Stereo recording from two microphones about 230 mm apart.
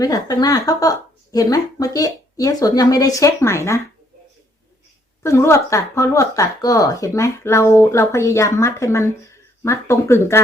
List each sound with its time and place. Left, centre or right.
0.0 s speech: centre
5.2 s speech: centre